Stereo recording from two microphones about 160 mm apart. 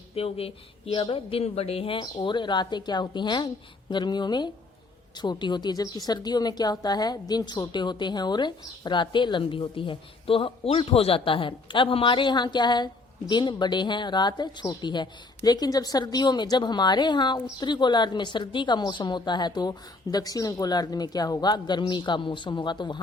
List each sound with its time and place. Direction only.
0.1 s a woman's voice: 40° left (ahead or behind)